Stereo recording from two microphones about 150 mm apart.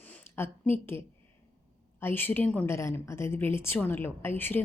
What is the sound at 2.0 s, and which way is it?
A woman's voice, 15° left (ahead or behind).